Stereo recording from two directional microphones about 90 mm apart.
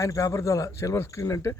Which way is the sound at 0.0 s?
35° left (ahead or behind).